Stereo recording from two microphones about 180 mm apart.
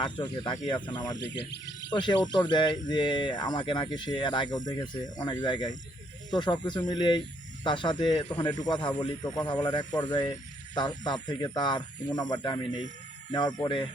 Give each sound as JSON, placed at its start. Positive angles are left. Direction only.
{"t": 0.0, "sound": "speech", "side_deg": 25}
{"t": 1.2, "sound": "speech", "side_deg": 75}
{"t": 1.9, "sound": "speech", "side_deg": 25}